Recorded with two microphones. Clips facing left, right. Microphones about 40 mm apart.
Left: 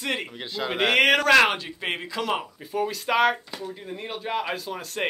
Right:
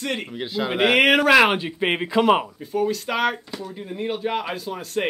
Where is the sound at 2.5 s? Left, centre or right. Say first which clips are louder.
Right 4 dB; centre.